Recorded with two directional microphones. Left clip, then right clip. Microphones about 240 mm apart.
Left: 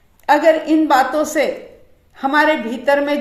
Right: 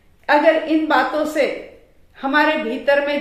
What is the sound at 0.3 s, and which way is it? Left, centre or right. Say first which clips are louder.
A woman's voice: left 2 dB; left.